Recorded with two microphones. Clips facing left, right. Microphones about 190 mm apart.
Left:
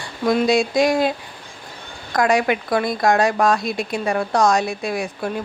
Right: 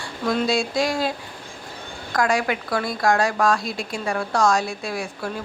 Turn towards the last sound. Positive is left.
turn(degrees=20)  # may be behind; listen again after turning